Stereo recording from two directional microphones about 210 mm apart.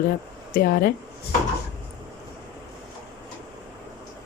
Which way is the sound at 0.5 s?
45° left (ahead or behind).